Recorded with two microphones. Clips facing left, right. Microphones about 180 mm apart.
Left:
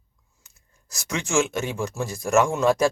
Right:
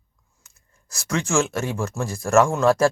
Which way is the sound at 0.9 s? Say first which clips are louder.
Right 3 dB; 20° left (ahead or behind).